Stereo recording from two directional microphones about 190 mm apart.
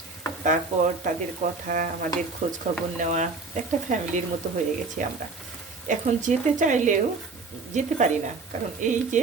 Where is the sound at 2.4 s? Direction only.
40° right (ahead or behind).